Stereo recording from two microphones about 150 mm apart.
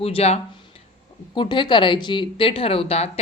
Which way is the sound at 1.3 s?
30° left (ahead or behind).